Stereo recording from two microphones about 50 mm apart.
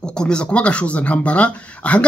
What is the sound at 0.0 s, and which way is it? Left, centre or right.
Speech, centre.